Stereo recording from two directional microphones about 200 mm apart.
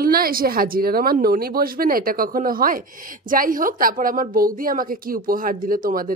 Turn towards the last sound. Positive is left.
turn(degrees=-45)  # may be behind; listen again after turning